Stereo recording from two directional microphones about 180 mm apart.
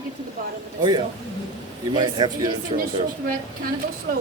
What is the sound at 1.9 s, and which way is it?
Speech, 20° right (ahead or behind).